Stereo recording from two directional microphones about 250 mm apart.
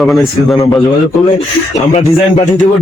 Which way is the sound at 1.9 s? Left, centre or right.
Left.